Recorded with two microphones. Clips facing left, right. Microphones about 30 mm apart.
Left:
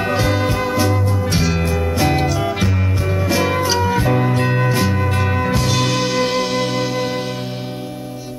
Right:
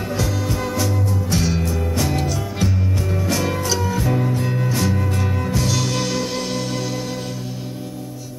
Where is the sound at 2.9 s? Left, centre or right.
Left.